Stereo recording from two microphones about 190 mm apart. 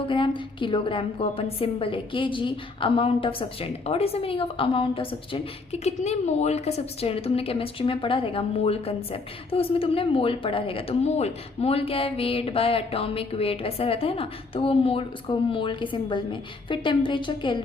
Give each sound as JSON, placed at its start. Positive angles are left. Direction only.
{"t": 0.1, "sound": "a woman's voice", "side_deg": 25}